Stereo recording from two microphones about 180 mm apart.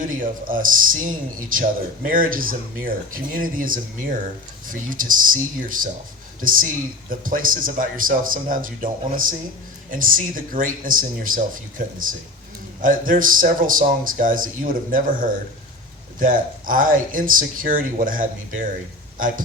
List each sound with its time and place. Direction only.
0.0 s speech: 50° right (ahead or behind)